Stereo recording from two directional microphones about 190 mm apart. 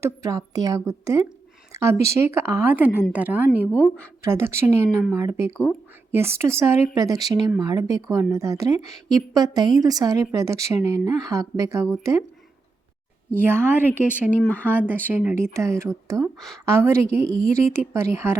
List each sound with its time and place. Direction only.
0.0 s a woman's voice: 15° right (ahead or behind)
13.4 s speech: 10° right (ahead or behind)
14.4 s speech: 10° left (ahead or behind)
14.7 s speech: 10° right (ahead or behind)